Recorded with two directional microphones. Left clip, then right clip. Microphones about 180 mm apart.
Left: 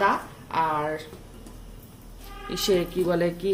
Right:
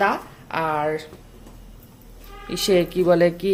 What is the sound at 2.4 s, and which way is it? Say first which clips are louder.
A woman's voice: right 5 dB; 30° right (ahead or behind).